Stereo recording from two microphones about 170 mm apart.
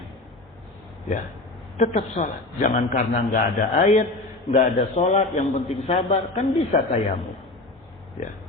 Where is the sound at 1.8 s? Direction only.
40° left (ahead or behind).